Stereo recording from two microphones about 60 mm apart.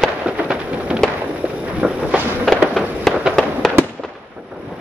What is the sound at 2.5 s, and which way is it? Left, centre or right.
Fireworks, centre.